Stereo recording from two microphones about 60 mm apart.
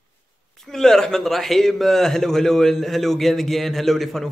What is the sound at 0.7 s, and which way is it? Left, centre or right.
A man's voice, centre.